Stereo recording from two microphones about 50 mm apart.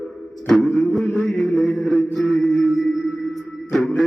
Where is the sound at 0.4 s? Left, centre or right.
Centre.